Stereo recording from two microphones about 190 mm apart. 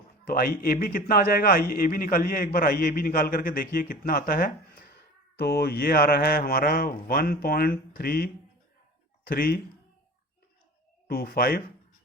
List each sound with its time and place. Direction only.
0.3 s a man's voice: 50° left (ahead or behind)
11.1 s a man's voice: 50° left (ahead or behind)